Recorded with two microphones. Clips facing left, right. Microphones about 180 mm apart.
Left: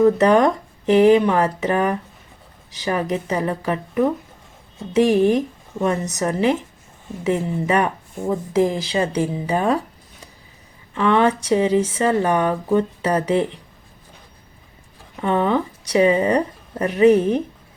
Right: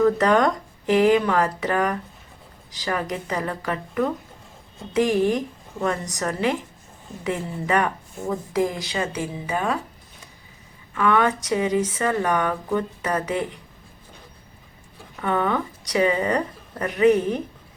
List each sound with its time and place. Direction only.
0.0 s speech: 20° left (ahead or behind)
10.9 s speech: 25° left (ahead or behind)
15.1 s speech: 25° left (ahead or behind)